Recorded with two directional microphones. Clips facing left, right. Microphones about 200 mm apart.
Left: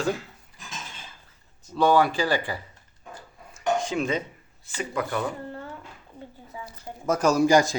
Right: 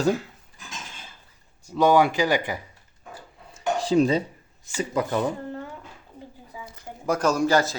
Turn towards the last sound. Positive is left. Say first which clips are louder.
# left 2 dB
turn(degrees=15)  # may be behind; listen again after turning